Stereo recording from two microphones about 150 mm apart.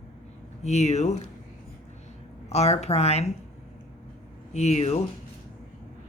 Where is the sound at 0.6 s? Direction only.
50° left (ahead or behind).